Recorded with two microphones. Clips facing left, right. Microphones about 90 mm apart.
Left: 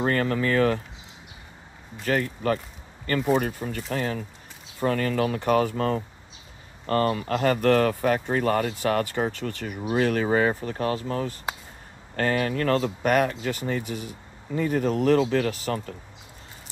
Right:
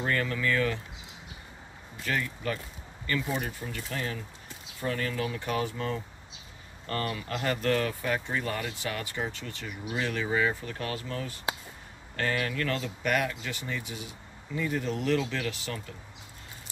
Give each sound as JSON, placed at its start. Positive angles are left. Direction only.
{"t": 0.0, "sound": "speech", "side_deg": 45}
{"t": 2.0, "sound": "speech", "side_deg": 45}
{"t": 6.9, "sound": "speech", "side_deg": 35}